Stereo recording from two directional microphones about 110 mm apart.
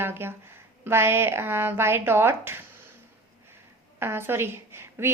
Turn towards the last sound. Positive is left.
turn(degrees=-20)  # may be behind; listen again after turning